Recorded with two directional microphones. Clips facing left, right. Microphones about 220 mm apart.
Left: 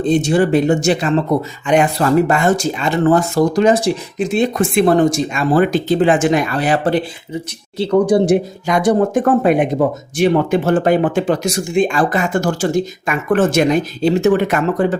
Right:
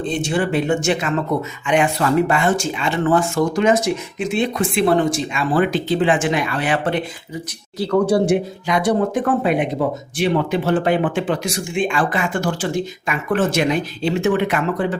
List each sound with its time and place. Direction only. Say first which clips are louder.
0.0 s speech: left 7 dB; 40° left (ahead or behind)
7.8 s speech: left 3 dB; 20° left (ahead or behind)
8.3 s speech: left 3 dB; 45° left (ahead or behind)